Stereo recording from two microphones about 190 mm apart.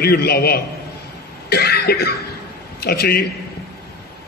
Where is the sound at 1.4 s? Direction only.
55° left (ahead or behind).